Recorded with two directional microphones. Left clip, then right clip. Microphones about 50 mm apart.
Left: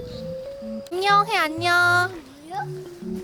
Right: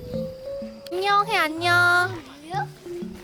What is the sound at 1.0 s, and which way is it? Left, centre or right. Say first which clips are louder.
Speech: left 2 dB; centre.